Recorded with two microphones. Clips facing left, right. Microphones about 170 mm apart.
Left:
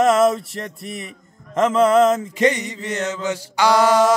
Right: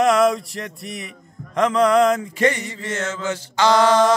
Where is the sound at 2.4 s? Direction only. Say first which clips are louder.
Left 2 dB; 15° left (ahead or behind).